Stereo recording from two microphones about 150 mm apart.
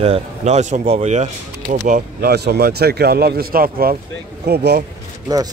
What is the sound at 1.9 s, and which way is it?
A man's voice, 80° right.